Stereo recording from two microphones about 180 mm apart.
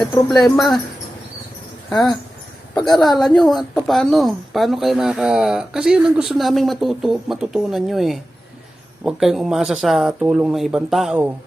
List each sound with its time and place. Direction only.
0.3 s speech: centre (ahead or behind)
1.9 s speech: 5° left (ahead or behind)